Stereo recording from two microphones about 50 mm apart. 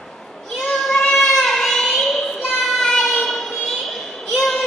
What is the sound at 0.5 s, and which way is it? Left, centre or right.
Child singing, centre.